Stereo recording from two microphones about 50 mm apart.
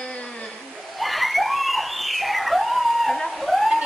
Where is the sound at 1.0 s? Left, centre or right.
Centre.